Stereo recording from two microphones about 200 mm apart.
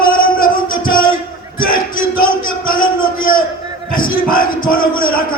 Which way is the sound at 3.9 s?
45° left (ahead or behind).